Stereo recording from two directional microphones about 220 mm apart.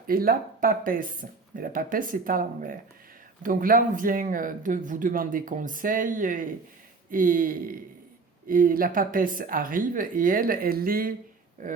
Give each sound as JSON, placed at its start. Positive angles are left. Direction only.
{"t": 0.1, "sound": "speech", "side_deg": -40}